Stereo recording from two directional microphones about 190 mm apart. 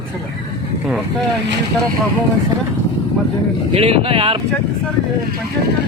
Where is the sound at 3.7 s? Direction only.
30° right (ahead or behind).